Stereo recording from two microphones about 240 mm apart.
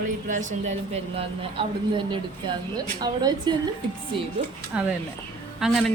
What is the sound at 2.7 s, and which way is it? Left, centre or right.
Speech, centre.